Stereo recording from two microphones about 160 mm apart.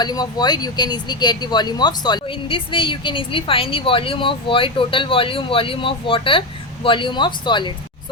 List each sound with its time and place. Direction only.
0.0 s speech: 25° left (ahead or behind)